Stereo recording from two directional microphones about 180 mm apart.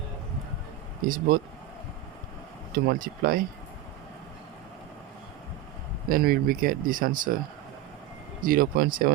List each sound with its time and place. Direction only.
1.0 s speech: 50° right (ahead or behind)
2.7 s speech: 55° right (ahead or behind)
6.1 s speech: 55° right (ahead or behind)
8.4 s speech: 50° right (ahead or behind)